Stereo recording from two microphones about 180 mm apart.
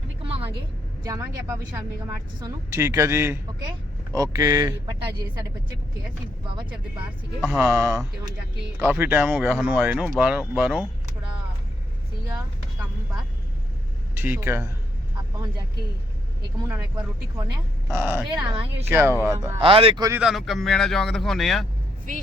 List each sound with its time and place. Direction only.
1.0 s a woman's voice: 20° right (ahead or behind)
7.4 s a woman's voice: 10° right (ahead or behind)
14.2 s a woman's voice: 10° right (ahead or behind)
16.6 s a woman's voice: 15° right (ahead or behind)
17.9 s a woman's voice: 10° right (ahead or behind)
18.3 s speech: 25° right (ahead or behind)
18.9 s a woman's voice: 15° right (ahead or behind)
19.5 s speech: 30° right (ahead or behind)
20.1 s speech: 5° right (ahead or behind)